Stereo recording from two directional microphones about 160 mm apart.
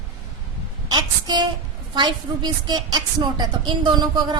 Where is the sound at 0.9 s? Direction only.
30° right (ahead or behind).